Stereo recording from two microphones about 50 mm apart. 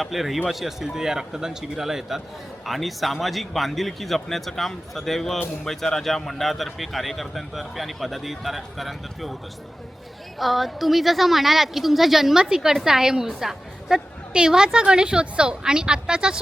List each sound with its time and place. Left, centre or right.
0.0 s a man's voice: centre
10.3 s a man's voice: centre